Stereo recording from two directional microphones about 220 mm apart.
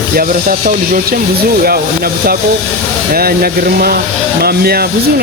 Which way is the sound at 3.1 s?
45° right (ahead or behind).